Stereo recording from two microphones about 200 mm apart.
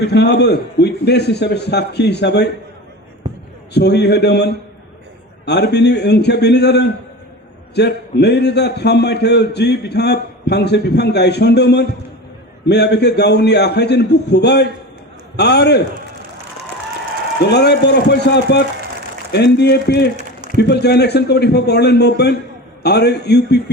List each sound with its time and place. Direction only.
0.0 s a man's voice: 55° left (ahead or behind)
3.8 s a man's voice: 55° left (ahead or behind)
17.4 s a man's voice: 55° left (ahead or behind)